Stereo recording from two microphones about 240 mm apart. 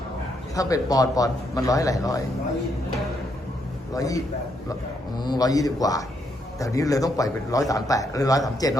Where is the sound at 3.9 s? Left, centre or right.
Centre.